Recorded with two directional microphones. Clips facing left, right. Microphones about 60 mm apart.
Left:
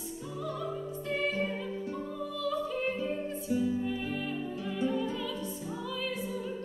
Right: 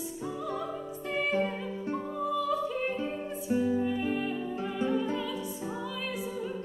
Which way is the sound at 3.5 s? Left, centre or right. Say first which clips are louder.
Right 3 dB; right.